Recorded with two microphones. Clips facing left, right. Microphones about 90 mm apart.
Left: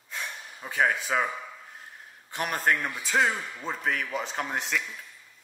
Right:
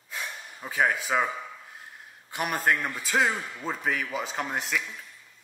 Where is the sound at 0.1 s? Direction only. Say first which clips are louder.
Even; centre (ahead or behind).